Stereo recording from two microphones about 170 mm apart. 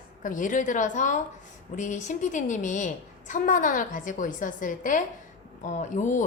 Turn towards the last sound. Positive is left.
turn(degrees=45)  # may be behind; listen again after turning